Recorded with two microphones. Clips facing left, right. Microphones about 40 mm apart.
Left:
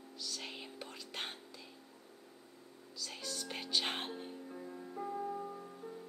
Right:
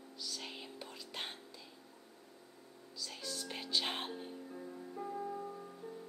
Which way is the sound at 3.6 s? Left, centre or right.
Centre.